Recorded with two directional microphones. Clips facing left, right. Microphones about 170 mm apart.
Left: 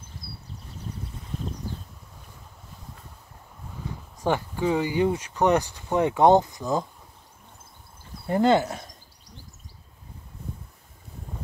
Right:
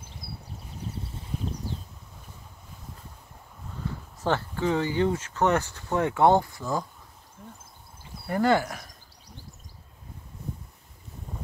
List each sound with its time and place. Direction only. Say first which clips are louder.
3.8 s speech: left 2 dB; 15° left (ahead or behind)
8.3 s speech: left 3 dB; 20° left (ahead or behind)